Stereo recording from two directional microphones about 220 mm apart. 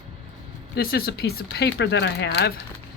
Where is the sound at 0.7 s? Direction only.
45° left (ahead or behind).